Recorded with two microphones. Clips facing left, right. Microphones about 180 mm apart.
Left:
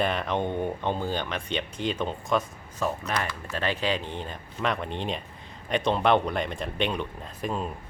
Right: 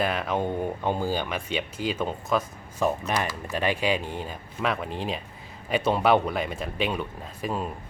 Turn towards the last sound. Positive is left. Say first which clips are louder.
# right 1 dB
turn(degrees=-5)  # may be behind; listen again after turning